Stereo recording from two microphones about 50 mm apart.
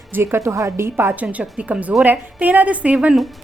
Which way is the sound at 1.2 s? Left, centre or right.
Right.